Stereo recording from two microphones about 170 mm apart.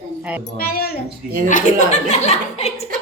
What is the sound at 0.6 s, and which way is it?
Speech, 65° left (ahead or behind).